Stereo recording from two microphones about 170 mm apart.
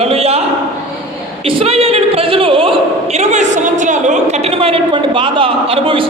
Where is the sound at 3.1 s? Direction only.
45° right (ahead or behind).